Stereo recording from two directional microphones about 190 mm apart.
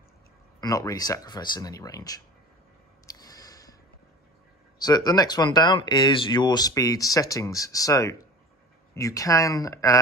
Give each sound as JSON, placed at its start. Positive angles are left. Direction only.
{"t": 0.6, "sound": "speech", "side_deg": 20}
{"t": 3.1, "sound": "a sound", "side_deg": 20}
{"t": 4.7, "sound": "speech", "side_deg": 20}